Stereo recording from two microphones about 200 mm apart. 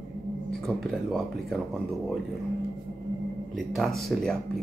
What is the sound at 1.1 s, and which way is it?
Speech, centre (ahead or behind).